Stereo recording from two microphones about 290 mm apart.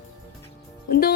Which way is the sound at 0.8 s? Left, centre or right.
Left.